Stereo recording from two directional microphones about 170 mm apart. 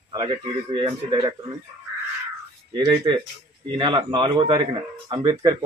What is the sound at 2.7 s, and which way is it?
Speech, 25° right (ahead or behind).